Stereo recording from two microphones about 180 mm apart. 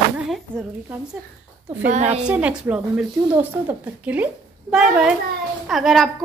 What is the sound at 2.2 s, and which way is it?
A woman's voice, 5° right (ahead or behind).